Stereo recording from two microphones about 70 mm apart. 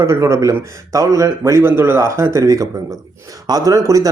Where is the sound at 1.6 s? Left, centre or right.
Right.